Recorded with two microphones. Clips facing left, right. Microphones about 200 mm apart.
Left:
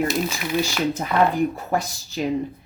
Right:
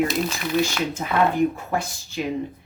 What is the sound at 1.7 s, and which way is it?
Speech, 35° left (ahead or behind).